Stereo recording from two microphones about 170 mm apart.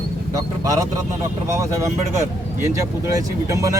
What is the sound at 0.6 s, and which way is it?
Speech, 20° right (ahead or behind).